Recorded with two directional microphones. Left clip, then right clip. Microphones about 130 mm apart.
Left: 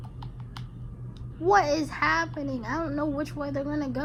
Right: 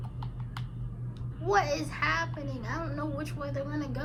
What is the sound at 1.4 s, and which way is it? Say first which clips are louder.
A woman's voice: left 6 dB; 65° left (ahead or behind).